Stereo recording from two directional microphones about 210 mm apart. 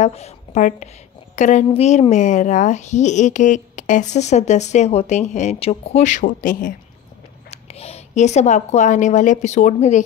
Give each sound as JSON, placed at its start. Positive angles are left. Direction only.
{"t": 0.0, "sound": "a woman's voice", "side_deg": 30}
{"t": 7.5, "sound": "a woman's voice", "side_deg": 30}